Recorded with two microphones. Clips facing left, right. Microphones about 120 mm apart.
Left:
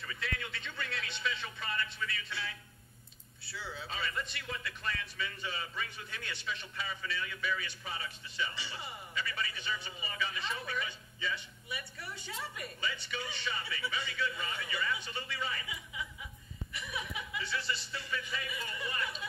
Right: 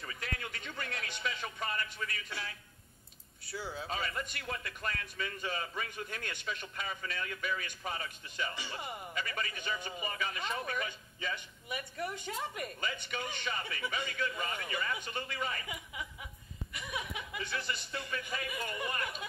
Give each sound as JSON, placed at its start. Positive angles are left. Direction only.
{"t": 0.0, "sound": "a man's voice", "side_deg": -40}
{"t": 17.3, "sound": "a man's voice", "side_deg": -50}